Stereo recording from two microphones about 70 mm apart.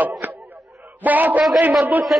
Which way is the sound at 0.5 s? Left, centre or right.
Centre.